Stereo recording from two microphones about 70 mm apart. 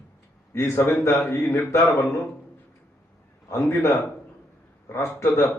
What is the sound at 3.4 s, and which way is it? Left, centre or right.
Speech, left.